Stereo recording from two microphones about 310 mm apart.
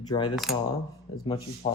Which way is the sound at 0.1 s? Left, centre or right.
Centre.